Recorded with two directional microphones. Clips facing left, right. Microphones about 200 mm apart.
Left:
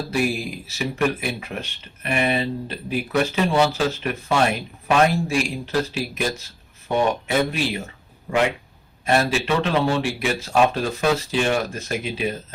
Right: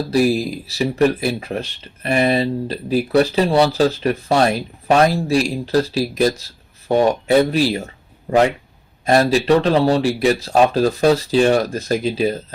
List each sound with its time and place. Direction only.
0.1 s speech: 35° right (ahead or behind)
9.0 s speech: 35° right (ahead or behind)